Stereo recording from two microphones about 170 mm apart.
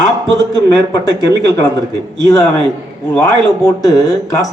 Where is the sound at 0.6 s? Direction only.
25° left (ahead or behind).